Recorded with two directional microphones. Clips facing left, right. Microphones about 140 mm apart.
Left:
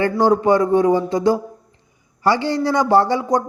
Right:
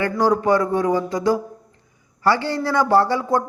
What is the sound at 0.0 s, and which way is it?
Speech, 25° left (ahead or behind).